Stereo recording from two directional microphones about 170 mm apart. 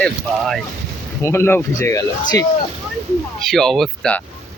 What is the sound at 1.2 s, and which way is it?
Speech, 15° left (ahead or behind).